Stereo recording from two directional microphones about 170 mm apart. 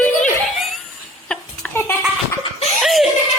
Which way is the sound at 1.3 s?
10° left (ahead or behind).